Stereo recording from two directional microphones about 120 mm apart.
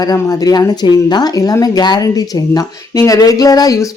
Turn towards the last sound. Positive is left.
turn(degrees=30)  # may be behind; listen again after turning